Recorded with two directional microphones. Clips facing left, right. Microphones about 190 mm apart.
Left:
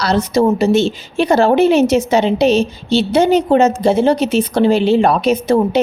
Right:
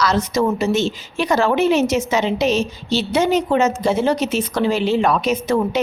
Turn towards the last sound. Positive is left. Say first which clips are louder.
# left 5 dB
turn(degrees=30)  # may be behind; listen again after turning